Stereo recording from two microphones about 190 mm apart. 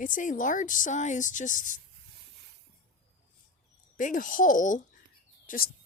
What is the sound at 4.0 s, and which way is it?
Speech, 45° left (ahead or behind).